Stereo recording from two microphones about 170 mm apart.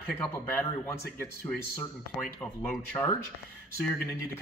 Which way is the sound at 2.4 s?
10° left (ahead or behind).